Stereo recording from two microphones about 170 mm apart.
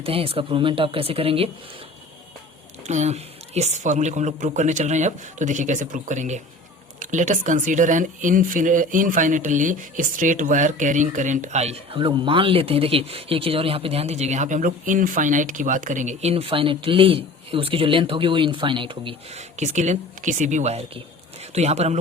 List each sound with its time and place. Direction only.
0.0 s speech: 35° right (ahead or behind)
2.8 s speech: 45° right (ahead or behind)